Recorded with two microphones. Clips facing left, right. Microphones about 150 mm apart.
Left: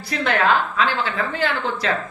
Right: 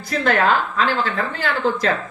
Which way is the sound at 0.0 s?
45° right (ahead or behind).